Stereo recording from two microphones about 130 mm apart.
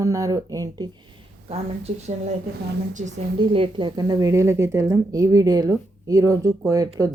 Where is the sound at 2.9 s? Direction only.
70° right (ahead or behind).